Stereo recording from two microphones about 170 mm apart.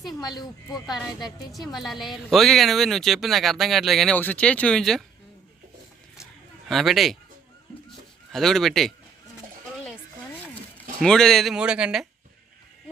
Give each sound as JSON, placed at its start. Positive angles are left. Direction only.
{"t": 0.2, "sound": "speech", "side_deg": 25}
{"t": 0.9, "sound": "a woman's voice", "side_deg": 0}
{"t": 6.7, "sound": "a woman's voice", "side_deg": 0}
{"t": 8.3, "sound": "a woman's voice", "side_deg": 0}
{"t": 11.0, "sound": "a woman's voice", "side_deg": 5}